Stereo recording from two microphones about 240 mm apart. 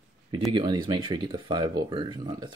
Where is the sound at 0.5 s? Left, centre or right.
Centre.